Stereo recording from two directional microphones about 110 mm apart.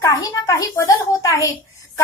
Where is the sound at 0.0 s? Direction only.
30° left (ahead or behind).